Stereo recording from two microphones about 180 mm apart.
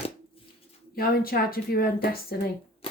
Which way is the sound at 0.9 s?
55° left (ahead or behind).